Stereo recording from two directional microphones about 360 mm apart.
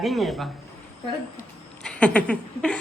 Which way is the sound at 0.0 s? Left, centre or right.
Centre.